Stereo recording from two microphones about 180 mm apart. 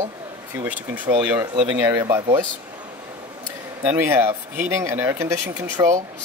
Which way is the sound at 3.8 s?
15° right (ahead or behind).